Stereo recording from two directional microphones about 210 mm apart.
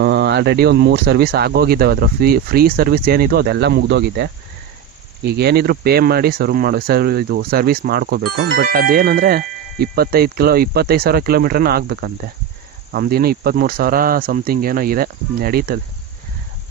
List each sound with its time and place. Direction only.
0.0 s speech: 50° right (ahead or behind)